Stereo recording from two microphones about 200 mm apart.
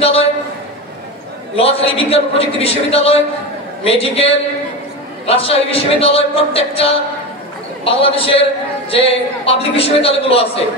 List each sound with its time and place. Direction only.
1.6 s a man's voice: 30° left (ahead or behind)